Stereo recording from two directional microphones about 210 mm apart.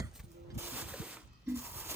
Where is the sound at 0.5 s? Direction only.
10° right (ahead or behind).